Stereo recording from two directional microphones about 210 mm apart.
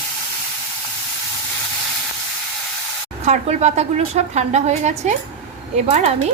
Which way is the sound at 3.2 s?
30° right (ahead or behind).